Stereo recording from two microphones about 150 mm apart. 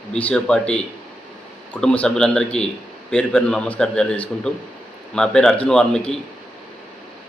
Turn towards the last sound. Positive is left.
turn(degrees=5)  # may be behind; listen again after turning